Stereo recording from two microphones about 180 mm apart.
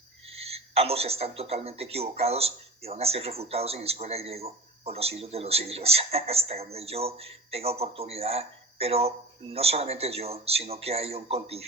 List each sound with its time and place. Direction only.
0.3 s speech: 35° right (ahead or behind)